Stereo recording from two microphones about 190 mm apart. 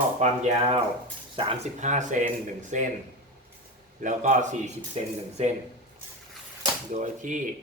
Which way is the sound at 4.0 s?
40° right (ahead or behind).